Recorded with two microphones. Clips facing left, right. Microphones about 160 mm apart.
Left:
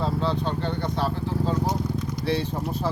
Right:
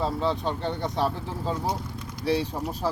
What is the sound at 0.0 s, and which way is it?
Speech, 10° right (ahead or behind).